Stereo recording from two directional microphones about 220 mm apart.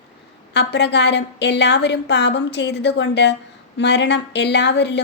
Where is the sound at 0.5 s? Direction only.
50° left (ahead or behind).